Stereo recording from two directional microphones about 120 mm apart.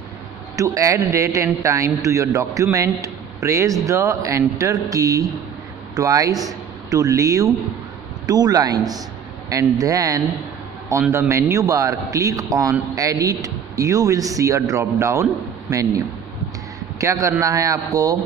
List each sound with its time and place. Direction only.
0.6 s speech: 25° right (ahead or behind)
17.0 s speech: 25° right (ahead or behind)